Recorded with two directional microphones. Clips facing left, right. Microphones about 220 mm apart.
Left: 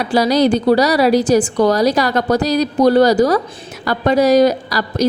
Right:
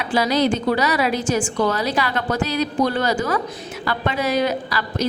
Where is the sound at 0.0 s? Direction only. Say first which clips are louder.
Left 5 dB; 40° left (ahead or behind).